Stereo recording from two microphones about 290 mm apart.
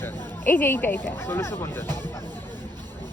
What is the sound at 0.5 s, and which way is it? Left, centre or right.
Speech, centre.